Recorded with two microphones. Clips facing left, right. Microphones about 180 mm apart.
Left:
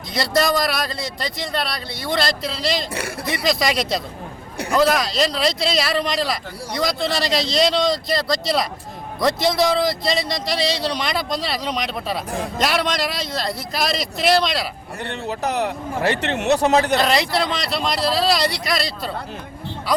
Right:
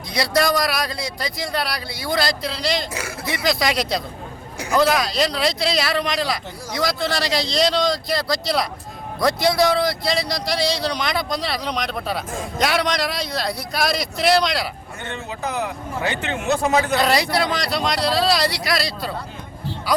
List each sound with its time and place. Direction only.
0.1 s a man's voice: centre (ahead or behind)
15.3 s speech: 75° left (ahead or behind)
16.9 s speech: centre (ahead or behind)